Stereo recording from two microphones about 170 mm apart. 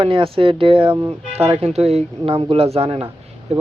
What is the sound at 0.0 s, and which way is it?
Speech, 30° right (ahead or behind).